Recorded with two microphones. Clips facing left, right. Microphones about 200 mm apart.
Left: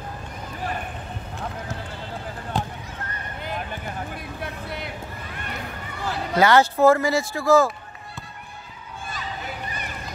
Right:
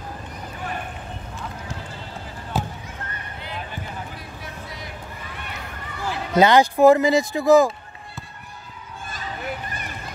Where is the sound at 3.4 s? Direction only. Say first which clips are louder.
Left 3 dB; 50° left (ahead or behind).